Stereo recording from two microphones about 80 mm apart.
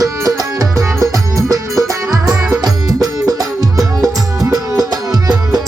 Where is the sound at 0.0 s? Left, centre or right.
Right.